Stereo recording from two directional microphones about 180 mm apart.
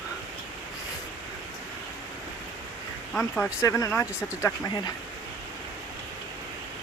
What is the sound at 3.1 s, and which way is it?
Speech, 10° left (ahead or behind).